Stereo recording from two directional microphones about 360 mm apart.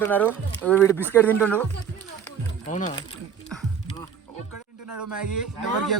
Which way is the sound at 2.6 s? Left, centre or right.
Left.